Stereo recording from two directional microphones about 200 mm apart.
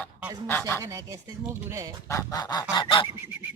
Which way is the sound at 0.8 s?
15° right (ahead or behind).